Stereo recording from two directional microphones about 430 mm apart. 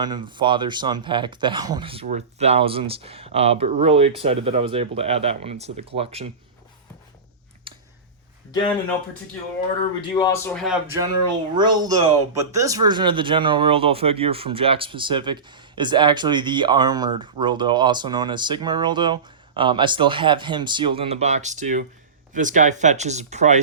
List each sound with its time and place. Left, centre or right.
0.0 s speech: centre
7.7 s a sound: centre
10.2 s a man's voice: centre